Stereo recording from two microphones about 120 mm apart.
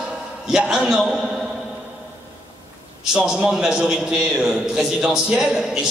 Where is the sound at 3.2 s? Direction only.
10° right (ahead or behind).